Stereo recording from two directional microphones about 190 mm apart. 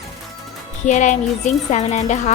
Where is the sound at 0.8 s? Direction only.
40° left (ahead or behind).